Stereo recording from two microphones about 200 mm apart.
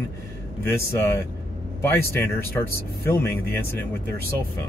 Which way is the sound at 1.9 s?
10° left (ahead or behind).